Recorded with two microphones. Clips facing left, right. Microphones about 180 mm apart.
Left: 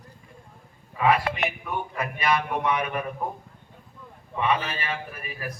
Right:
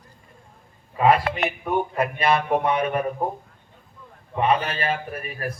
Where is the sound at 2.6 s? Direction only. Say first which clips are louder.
Right 3 dB; 30° right (ahead or behind).